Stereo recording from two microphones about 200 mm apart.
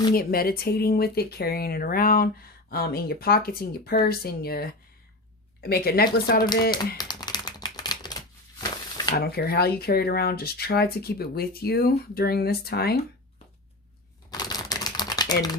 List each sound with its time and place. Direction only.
0.1 s speech: 50° left (ahead or behind)
6.7 s typewriter: 20° left (ahead or behind)
9.1 s speech: 50° left (ahead or behind)
14.3 s typewriter: 20° left (ahead or behind)